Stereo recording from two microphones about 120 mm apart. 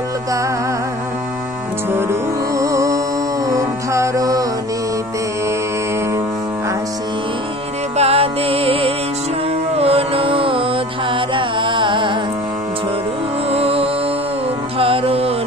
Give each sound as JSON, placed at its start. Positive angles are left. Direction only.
{"t": 2.5, "sound": "music", "side_deg": -25}
{"t": 8.0, "sound": "music", "side_deg": -55}
{"t": 13.5, "sound": "music", "side_deg": -55}